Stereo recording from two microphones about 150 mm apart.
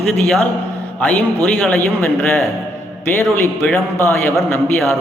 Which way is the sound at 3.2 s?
15° left (ahead or behind).